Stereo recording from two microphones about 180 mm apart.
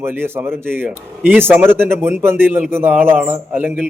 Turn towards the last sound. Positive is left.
turn(degrees=-10)  # may be behind; listen again after turning